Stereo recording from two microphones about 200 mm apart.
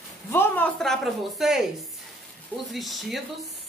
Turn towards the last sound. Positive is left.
turn(degrees=0)  # may be behind; listen again after turning